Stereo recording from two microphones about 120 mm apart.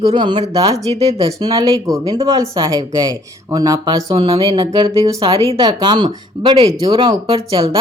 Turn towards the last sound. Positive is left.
turn(degrees=-50)  # may be behind; listen again after turning